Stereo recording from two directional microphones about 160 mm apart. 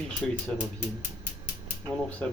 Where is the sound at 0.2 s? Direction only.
5° left (ahead or behind).